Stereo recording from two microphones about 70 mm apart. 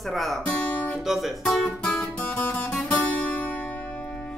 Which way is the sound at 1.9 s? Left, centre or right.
Left.